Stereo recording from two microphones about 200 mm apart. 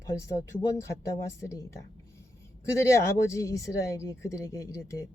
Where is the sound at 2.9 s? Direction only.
15° left (ahead or behind).